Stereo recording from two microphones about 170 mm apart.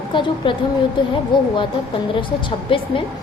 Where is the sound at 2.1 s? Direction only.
30° left (ahead or behind).